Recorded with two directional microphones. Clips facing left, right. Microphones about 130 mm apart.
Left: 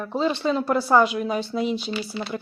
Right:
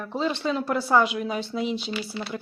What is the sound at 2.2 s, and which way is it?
Speech, 20° left (ahead or behind).